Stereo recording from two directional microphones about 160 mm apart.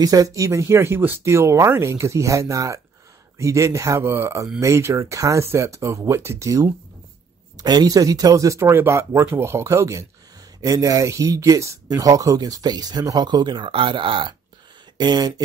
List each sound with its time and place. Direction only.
0.0 s speech: 25° right (ahead or behind)